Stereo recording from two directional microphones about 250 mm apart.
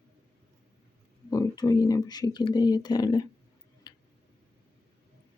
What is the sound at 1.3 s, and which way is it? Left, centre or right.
Speech, centre.